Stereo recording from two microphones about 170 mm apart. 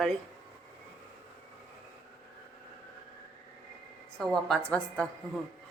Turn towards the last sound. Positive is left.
turn(degrees=5)  # may be behind; listen again after turning